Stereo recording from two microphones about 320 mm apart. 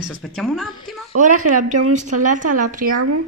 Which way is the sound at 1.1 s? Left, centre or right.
Right.